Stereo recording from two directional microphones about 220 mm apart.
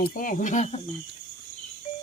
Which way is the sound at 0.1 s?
40° left (ahead or behind).